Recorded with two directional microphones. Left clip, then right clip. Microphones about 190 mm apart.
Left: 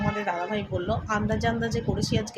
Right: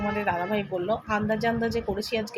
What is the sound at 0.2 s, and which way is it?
A woman's voice, 5° right (ahead or behind).